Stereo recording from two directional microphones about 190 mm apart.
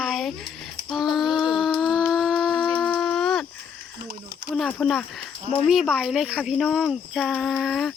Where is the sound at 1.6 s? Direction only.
Centre (ahead or behind).